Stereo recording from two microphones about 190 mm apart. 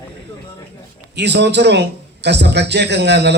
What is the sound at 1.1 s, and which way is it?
A man's voice, 65° right (ahead or behind).